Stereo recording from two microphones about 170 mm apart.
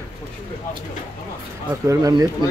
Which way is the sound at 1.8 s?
20° right (ahead or behind).